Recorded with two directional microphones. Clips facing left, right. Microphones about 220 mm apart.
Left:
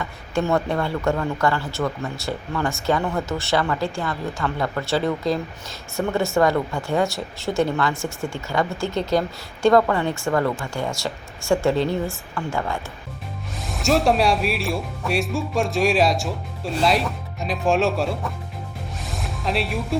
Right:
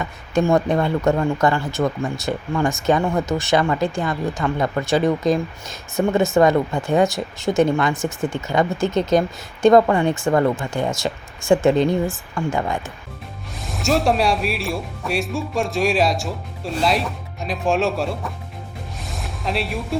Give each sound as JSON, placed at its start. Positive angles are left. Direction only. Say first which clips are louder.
{"t": 0.0, "sound": "speech", "louder": "right 4 dB", "side_deg": -15}
{"t": 13.6, "sound": "speech", "louder": "even", "side_deg": 0}
{"t": 19.0, "sound": "music", "louder": "even", "side_deg": 0}